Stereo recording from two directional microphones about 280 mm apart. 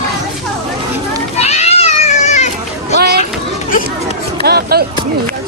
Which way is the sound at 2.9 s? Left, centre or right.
Right.